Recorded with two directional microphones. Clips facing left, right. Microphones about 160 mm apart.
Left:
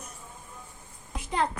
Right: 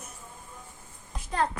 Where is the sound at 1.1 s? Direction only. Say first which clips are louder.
Even; 15° left (ahead or behind).